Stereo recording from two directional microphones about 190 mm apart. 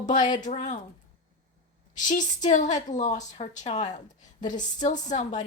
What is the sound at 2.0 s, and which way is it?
Speech, 40° left (ahead or behind).